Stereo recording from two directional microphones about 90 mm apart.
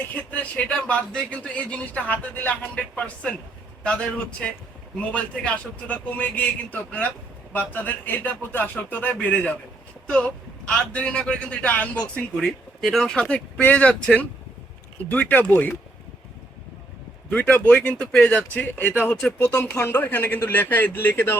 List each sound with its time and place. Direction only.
0.1 s a man's voice: 15° left (ahead or behind)
17.2 s a man's voice: 15° left (ahead or behind)